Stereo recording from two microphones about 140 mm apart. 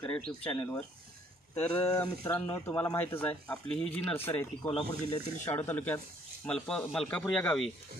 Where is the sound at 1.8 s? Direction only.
25° left (ahead or behind).